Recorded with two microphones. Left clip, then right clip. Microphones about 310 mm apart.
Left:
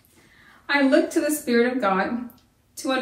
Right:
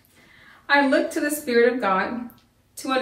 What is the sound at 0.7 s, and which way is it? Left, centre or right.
A woman's voice, centre.